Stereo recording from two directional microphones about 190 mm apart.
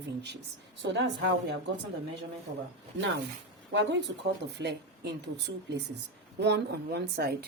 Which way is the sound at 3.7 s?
65° right (ahead or behind).